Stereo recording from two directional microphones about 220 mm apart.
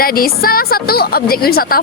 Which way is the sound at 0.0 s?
40° left (ahead or behind).